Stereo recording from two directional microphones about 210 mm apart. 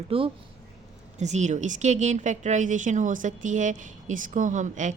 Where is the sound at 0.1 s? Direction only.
25° right (ahead or behind).